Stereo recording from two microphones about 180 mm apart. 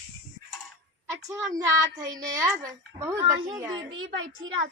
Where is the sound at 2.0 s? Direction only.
20° right (ahead or behind).